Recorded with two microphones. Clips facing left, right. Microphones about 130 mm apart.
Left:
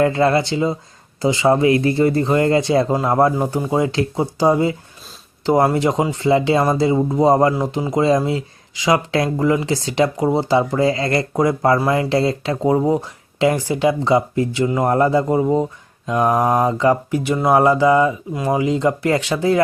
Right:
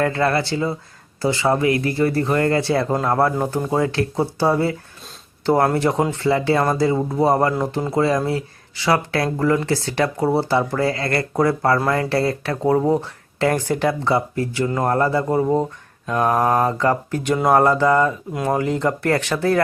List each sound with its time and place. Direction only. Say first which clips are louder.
0.0 s a man's voice: left 4 dB; 20° left (ahead or behind)